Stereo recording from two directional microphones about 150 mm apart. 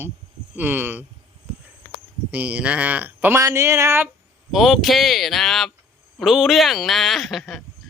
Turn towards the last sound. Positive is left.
turn(degrees=0)  # may be behind; listen again after turning